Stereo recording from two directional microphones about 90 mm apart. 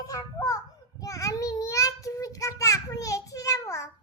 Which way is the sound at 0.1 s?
40° left (ahead or behind).